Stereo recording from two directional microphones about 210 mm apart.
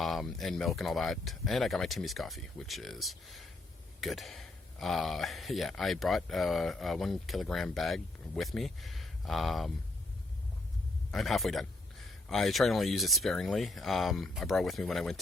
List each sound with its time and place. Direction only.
0.0 s speech: centre (ahead or behind)
11.1 s speech: centre (ahead or behind)